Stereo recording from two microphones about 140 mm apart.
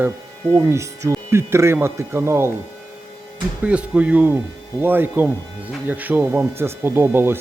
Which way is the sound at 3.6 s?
10° right (ahead or behind).